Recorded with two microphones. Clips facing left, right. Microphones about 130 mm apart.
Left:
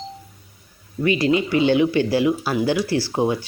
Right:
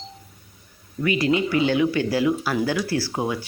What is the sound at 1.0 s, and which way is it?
Speech, 25° left (ahead or behind).